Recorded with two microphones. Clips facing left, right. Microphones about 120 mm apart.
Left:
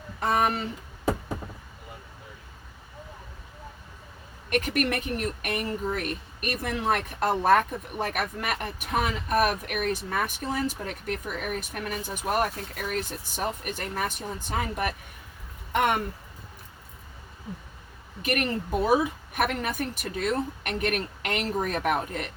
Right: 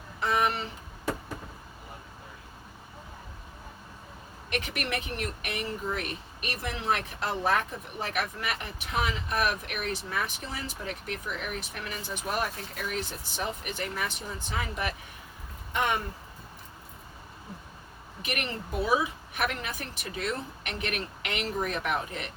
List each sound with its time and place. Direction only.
0.2 s speech: 45° left (ahead or behind)
4.4 s speech: 45° left (ahead or behind)
15.7 s speech: 55° left (ahead or behind)
18.2 s speech: 45° left (ahead or behind)